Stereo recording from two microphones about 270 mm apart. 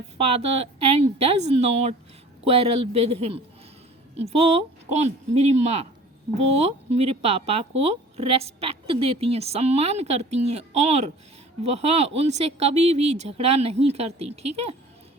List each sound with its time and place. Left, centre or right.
0.2 s a woman's voice: right